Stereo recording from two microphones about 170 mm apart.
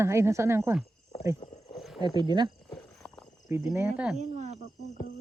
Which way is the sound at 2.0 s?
25° right (ahead or behind).